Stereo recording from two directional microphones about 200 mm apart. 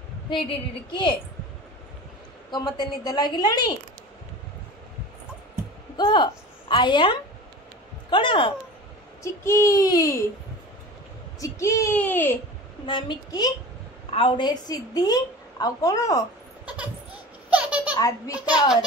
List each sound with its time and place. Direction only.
0.3 s a woman's voice: 25° left (ahead or behind)
2.5 s a woman's voice: 20° left (ahead or behind)
5.9 s a woman's voice: 25° left (ahead or behind)
9.2 s a child's voice: 15° left (ahead or behind)
11.3 s a child's voice: 15° left (ahead or behind)
12.8 s a woman's voice: 25° left (ahead or behind)
17.5 s baby laughter: 5° right (ahead or behind)
17.9 s a child's voice: 20° left (ahead or behind)